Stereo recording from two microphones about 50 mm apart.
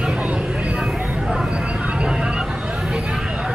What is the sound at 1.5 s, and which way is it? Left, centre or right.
Vehicle, right.